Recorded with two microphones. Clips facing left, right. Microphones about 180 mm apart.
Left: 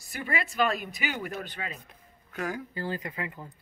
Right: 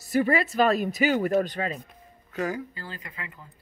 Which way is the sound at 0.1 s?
40° right (ahead or behind).